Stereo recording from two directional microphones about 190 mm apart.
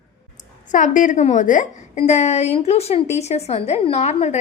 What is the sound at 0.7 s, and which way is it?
A woman's voice, 40° left (ahead or behind).